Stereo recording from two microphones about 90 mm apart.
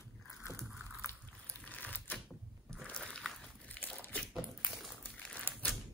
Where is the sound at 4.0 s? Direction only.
15° left (ahead or behind).